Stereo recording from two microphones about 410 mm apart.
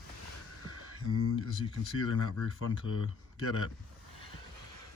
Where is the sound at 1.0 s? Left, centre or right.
Left.